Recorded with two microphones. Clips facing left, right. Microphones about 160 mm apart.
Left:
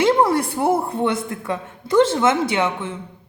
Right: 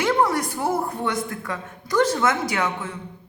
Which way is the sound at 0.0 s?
30° left (ahead or behind).